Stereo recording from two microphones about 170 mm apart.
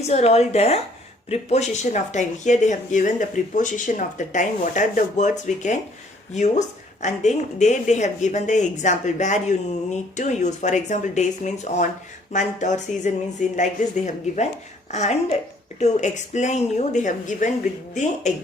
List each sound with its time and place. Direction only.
0.1 s speech: 40° left (ahead or behind)